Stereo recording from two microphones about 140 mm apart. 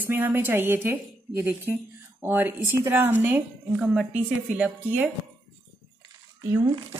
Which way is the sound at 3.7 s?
5° right (ahead or behind).